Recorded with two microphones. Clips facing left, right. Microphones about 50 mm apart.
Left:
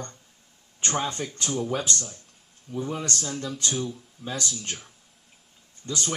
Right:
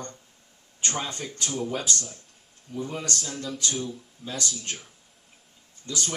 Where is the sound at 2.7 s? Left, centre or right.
Left.